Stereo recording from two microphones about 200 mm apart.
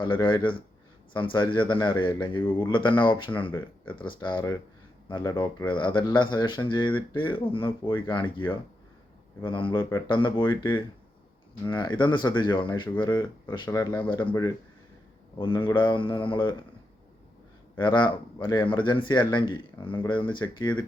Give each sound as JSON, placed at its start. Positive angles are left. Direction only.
{"t": 0.0, "sound": "speech", "side_deg": 25}
{"t": 17.7, "sound": "speech", "side_deg": 25}